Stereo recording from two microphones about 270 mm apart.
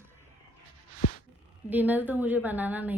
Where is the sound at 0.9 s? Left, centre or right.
Left.